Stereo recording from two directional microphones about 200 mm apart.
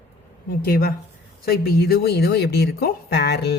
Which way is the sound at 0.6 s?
50° left (ahead or behind).